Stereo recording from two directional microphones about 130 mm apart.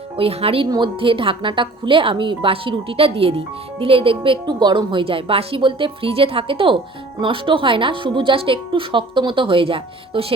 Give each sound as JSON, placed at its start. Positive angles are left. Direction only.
{"t": 0.2, "sound": "a woman's voice", "side_deg": -50}